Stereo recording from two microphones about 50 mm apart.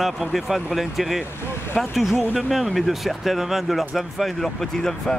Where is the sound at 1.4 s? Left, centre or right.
Left.